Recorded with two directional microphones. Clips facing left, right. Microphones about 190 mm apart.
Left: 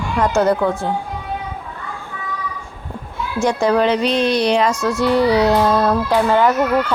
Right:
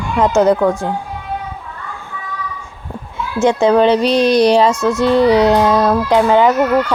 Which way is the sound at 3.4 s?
25° right (ahead or behind).